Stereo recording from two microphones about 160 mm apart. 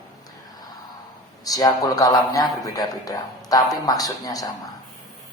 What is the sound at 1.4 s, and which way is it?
A man's voice, 25° left (ahead or behind).